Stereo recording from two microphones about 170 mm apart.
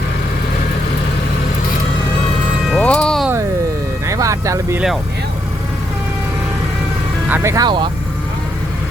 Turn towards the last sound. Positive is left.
turn(degrees=-25)  # may be behind; listen again after turning